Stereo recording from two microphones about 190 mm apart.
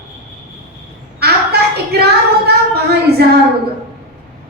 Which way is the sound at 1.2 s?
60° right (ahead or behind).